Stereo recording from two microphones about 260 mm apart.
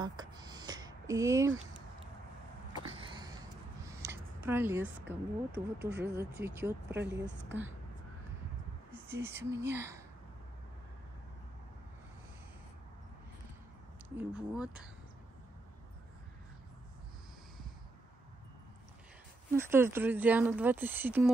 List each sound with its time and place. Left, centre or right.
0.0 s a sound: centre
3.8 s a sound: centre
5.0 s speech: right
6.4 s speech: centre
7.2 s a woman's voice: right
9.0 s speech: centre
14.1 s speech: centre
19.5 s speech: centre